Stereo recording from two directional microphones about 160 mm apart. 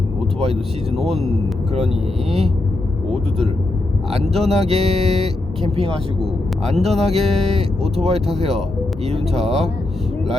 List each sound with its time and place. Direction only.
3.1 s speech: 40° right (ahead or behind)
6.7 s speech: 40° right (ahead or behind)